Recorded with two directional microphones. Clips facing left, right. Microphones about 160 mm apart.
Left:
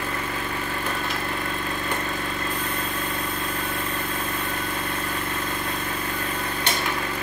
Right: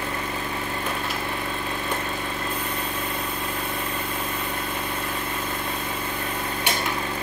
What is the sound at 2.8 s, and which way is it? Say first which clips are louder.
Vehicle: even; 5° right (ahead or behind).